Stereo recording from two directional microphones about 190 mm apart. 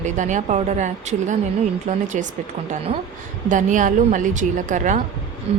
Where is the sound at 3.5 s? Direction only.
40° right (ahead or behind).